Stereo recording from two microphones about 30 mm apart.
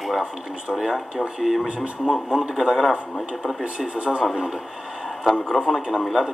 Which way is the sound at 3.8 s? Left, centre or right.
Right.